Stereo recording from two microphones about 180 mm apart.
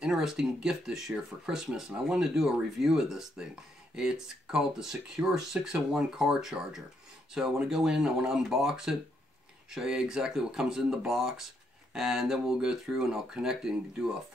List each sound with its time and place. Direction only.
0.0 s speech: 5° right (ahead or behind)